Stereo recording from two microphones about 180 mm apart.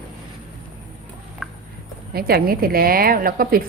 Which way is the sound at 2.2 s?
60° right (ahead or behind).